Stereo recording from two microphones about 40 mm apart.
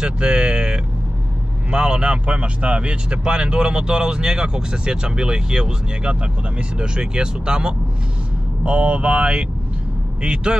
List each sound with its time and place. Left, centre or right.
0.0 s vehicle: right
1.7 s speech: right